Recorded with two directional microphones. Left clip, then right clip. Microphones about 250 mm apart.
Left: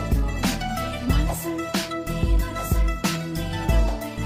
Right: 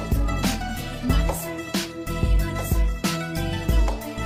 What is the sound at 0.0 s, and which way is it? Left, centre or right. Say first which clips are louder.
Music: even; centre.